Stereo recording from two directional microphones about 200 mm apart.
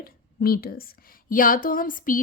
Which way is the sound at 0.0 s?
50° left (ahead or behind).